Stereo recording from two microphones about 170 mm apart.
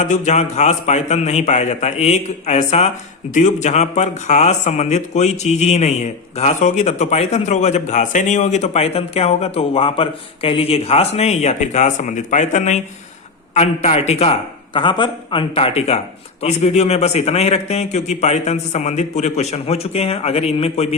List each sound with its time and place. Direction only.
0.0 s speech: 40° left (ahead or behind)